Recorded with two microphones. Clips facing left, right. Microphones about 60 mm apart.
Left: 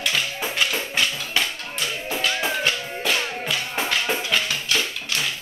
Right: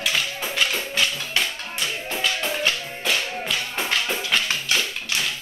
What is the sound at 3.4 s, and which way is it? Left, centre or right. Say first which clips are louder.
Tap: left 1 dB; centre.